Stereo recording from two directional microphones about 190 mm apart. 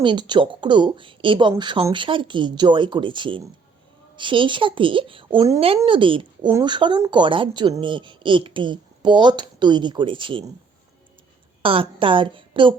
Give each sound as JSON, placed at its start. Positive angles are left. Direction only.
{"t": 0.0, "sound": "speech", "side_deg": -25}
{"t": 11.6, "sound": "speech", "side_deg": -25}